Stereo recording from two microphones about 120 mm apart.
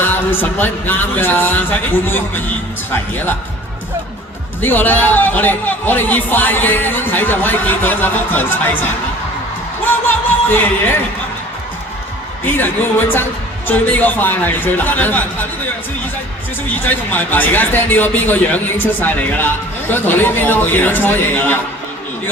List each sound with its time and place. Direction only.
0.0 s speech: 15° left (ahead or behind)
4.6 s speech: 15° left (ahead or behind)
9.8 s speech: 15° left (ahead or behind)
12.5 s speech: 15° left (ahead or behind)
16.6 s speech: 15° left (ahead or behind)